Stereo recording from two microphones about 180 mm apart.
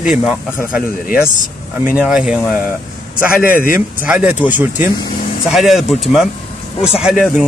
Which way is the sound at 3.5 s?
50° left (ahead or behind).